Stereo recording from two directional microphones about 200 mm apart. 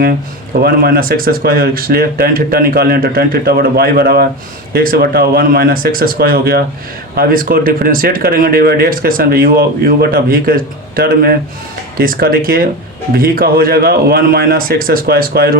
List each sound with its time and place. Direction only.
0.6 s speech: 50° right (ahead or behind)